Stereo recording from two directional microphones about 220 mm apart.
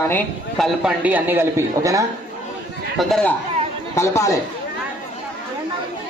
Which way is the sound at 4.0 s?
15° left (ahead or behind).